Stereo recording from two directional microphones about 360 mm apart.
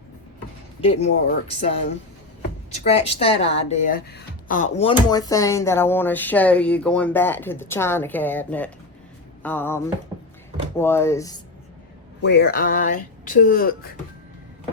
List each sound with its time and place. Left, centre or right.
0.8 s speech: centre
2.7 s speech: centre
9.4 s a sound: centre
10.8 s speech: centre
12.2 s speech: left